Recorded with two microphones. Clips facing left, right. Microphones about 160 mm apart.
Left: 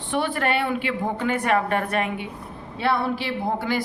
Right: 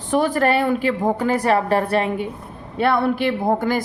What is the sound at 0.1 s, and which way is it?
A woman's voice, 40° right (ahead or behind).